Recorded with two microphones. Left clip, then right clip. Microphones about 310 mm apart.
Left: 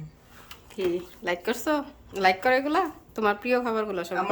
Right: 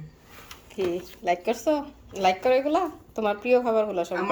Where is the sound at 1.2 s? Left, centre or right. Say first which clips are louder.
Right 4 dB; left.